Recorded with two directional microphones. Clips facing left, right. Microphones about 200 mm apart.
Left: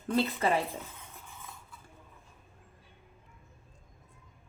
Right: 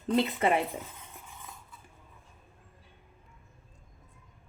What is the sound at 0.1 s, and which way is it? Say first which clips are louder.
Speech: right 2 dB; 20° right (ahead or behind).